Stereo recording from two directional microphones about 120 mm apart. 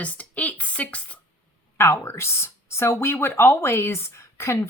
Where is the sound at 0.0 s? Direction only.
10° left (ahead or behind).